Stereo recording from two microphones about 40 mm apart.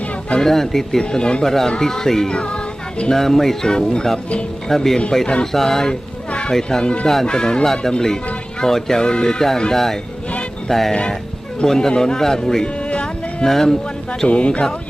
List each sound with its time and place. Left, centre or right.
0.4 s speech: centre
1.0 s speech: left
2.3 s speech: left
3.1 s speech: centre
6.8 s speech: left
12.6 s a sound: left
13.4 s speech: centre
14.3 s speech: left